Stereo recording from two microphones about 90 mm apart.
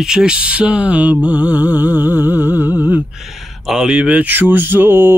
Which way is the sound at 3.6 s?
5° right (ahead or behind).